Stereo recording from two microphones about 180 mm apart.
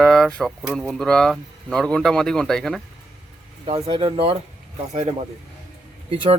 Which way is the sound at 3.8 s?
30° right (ahead or behind).